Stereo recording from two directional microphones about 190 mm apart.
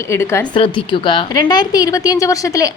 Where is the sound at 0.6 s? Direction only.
25° left (ahead or behind).